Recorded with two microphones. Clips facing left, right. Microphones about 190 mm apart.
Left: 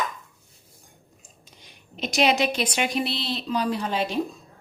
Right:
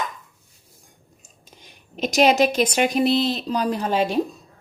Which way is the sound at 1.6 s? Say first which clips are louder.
Right 6 dB; 45° right (ahead or behind).